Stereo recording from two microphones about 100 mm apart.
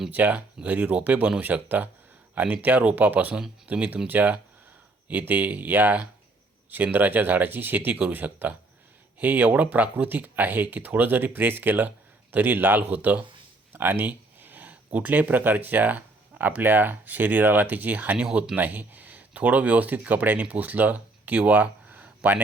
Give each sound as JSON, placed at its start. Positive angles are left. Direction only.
{"t": 0.1, "sound": "speech", "side_deg": -15}
{"t": 18.5, "sound": "speech", "side_deg": -15}